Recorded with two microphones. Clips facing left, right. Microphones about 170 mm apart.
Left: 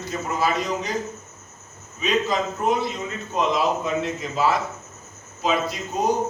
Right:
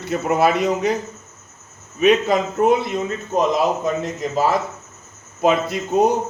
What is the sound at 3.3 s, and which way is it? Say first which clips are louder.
A man's voice: right 4 dB; 45° right (ahead or behind).